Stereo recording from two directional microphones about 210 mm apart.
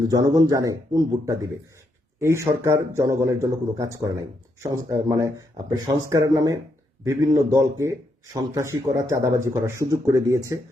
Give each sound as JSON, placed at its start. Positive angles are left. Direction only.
{"t": 0.1, "sound": "speech", "side_deg": -15}